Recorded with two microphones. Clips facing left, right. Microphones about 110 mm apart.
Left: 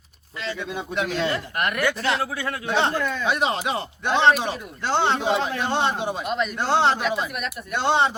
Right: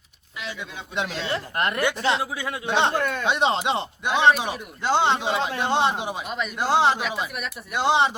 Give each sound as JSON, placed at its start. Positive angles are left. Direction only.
{"t": 0.9, "sound": "speech", "side_deg": -25}
{"t": 3.0, "sound": "speech", "side_deg": -55}
{"t": 3.2, "sound": "speech", "side_deg": -25}
{"t": 4.0, "sound": "a man's voice", "side_deg": -10}
{"t": 5.7, "sound": "a man's voice", "side_deg": -15}